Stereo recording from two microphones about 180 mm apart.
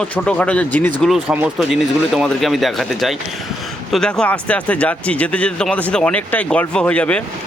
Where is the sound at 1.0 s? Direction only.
5° right (ahead or behind).